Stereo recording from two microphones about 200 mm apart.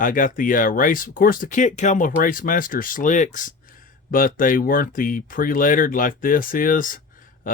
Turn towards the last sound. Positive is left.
turn(degrees=45)  # may be behind; listen again after turning